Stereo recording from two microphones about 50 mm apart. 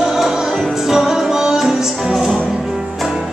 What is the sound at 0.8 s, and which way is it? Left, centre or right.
Music, centre.